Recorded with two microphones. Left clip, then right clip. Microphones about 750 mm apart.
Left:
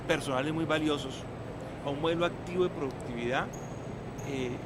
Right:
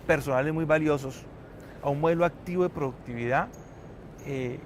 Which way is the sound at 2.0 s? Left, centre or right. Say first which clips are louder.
Right 5 dB; right.